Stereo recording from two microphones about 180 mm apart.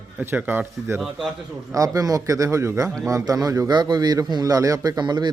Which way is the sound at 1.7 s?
20° right (ahead or behind).